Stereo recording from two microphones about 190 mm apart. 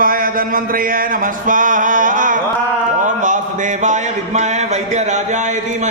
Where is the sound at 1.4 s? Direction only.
45° right (ahead or behind).